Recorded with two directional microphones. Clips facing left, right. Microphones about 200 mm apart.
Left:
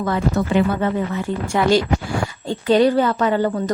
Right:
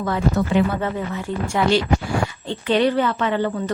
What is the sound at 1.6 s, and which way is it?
Speech, 60° left (ahead or behind).